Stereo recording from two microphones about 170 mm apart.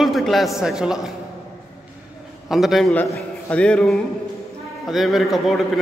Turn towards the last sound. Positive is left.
turn(degrees=0)  # may be behind; listen again after turning